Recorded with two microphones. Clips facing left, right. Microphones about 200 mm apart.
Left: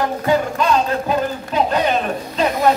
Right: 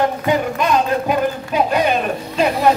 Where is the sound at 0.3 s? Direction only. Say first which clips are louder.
Left 3 dB; 15° right (ahead or behind).